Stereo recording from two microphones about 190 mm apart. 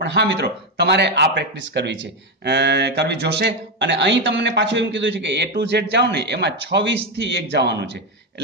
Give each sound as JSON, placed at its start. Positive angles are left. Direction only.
{"t": 0.0, "sound": "speech", "side_deg": -65}